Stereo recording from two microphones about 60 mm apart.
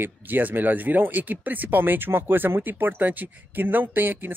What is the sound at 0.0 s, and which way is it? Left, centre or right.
Speech, right.